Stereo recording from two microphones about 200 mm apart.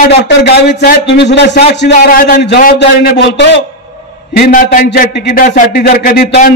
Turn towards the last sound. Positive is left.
turn(degrees=50)  # may be behind; listen again after turning